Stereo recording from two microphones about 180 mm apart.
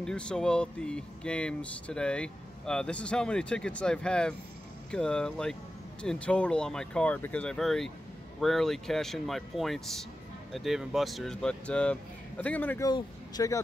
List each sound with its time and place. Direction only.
0.0 s speech: 5° left (ahead or behind)
12.8 s speech: 20° left (ahead or behind)